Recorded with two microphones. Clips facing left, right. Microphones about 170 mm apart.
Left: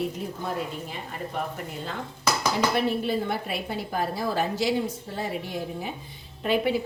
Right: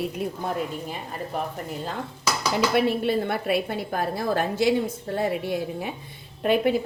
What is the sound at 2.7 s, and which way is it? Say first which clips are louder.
A woman's voice: right 3 dB; 65° right (ahead or behind).